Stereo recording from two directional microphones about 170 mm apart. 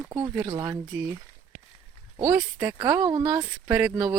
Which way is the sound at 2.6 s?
20° right (ahead or behind).